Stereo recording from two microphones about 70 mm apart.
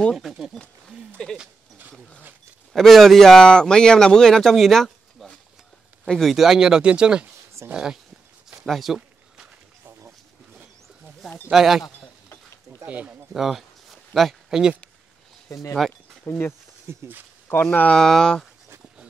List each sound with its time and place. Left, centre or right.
0.1 s speech: centre
1.2 s speech: centre
2.7 s speech: centre
6.3 s speech: centre
8.6 s a sound: centre
11.5 s speech: centre
12.8 s speech: right
13.3 s a sound: centre
15.5 s speech: left
16.3 s speech: left
16.8 s speech: right
17.6 s speech: centre
18.0 s speech: centre